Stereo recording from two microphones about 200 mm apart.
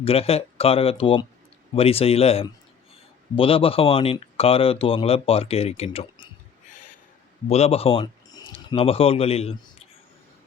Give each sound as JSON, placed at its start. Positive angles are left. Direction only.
{"t": 0.0, "sound": "speech", "side_deg": 30}
{"t": 7.4, "sound": "speech", "side_deg": 30}